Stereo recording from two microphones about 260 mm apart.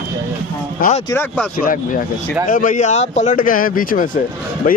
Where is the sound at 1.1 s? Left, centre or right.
Centre.